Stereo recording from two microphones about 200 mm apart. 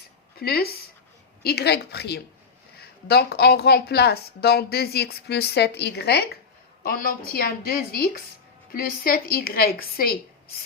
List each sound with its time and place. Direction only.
0.3 s a woman's voice: 50° left (ahead or behind)